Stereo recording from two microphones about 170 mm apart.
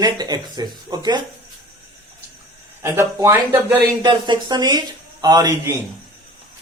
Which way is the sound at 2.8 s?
15° right (ahead or behind).